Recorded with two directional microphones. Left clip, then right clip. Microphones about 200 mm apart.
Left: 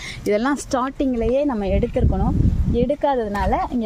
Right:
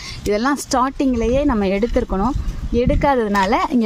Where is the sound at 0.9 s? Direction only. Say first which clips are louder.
Right 2 dB; 20° right (ahead or behind).